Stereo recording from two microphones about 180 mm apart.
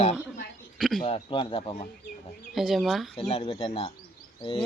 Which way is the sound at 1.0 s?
30° left (ahead or behind).